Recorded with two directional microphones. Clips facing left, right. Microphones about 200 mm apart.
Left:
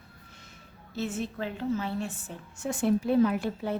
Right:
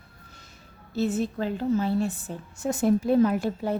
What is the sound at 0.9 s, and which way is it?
A woman's voice, 35° right (ahead or behind).